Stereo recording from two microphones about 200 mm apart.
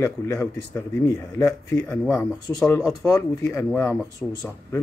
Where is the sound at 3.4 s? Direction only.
15° left (ahead or behind).